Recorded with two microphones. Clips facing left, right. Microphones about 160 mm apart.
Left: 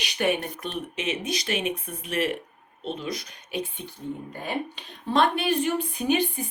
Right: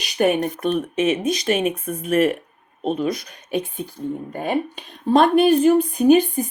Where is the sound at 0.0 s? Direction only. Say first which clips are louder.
Right 7 dB; 45° right (ahead or behind).